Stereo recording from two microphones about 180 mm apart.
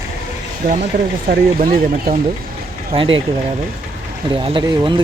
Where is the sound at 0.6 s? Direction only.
50° right (ahead or behind).